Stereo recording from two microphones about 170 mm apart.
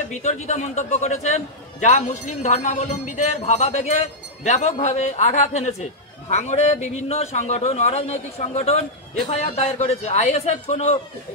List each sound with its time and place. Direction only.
0.2 s a man's voice: 45° left (ahead or behind)